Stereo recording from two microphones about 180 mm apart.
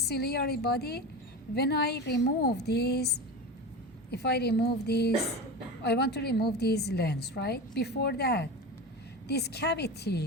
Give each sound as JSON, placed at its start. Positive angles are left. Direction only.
{"t": 0.0, "sound": "a woman's voice", "side_deg": 60}
{"t": 4.1, "sound": "a woman's voice", "side_deg": 65}